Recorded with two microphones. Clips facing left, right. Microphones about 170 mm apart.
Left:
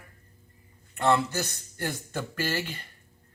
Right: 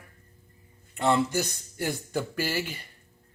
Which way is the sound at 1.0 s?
15° right (ahead or behind).